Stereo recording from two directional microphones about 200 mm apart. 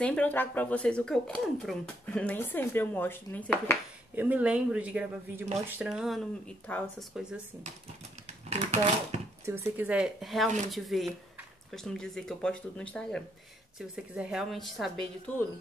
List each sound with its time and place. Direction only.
0.0 s speech: 5° left (ahead or behind)
4.1 s speech: 10° right (ahead or behind)
8.5 s a sound: 35° right (ahead or behind)
9.5 s speech: 10° right (ahead or behind); by 15.4 s 10° left (ahead or behind)